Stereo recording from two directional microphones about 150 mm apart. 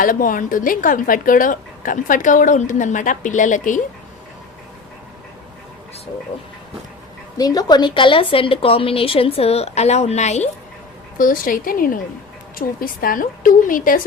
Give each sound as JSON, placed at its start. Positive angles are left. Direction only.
{"t": 0.0, "sound": "speech", "side_deg": 65}
{"t": 7.3, "sound": "a woman's voice", "side_deg": 25}
{"t": 11.2, "sound": "a woman's voice", "side_deg": 65}